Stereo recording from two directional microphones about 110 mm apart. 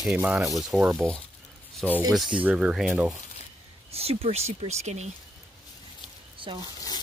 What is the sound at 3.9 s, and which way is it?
Speech, 65° right (ahead or behind).